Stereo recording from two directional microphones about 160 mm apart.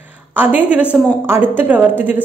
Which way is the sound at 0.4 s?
10° right (ahead or behind).